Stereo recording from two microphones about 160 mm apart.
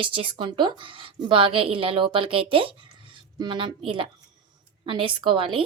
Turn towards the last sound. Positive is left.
turn(degrees=-30)  # may be behind; listen again after turning